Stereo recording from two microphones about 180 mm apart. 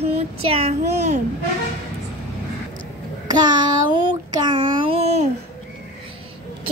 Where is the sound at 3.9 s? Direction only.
25° right (ahead or behind).